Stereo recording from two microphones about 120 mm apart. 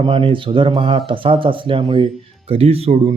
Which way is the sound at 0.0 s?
50° right (ahead or behind).